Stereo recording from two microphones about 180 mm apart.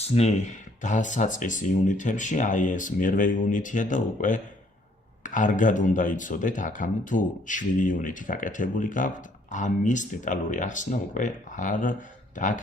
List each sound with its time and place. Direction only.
0.0 s speech: 35° left (ahead or behind)